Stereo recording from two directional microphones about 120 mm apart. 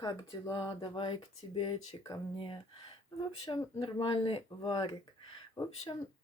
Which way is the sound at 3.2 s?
40° left (ahead or behind).